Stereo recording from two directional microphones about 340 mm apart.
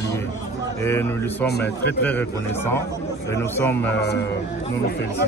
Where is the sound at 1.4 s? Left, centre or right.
Left.